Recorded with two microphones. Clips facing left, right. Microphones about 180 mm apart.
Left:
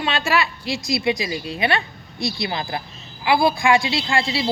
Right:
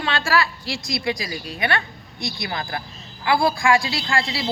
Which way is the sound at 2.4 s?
25° left (ahead or behind).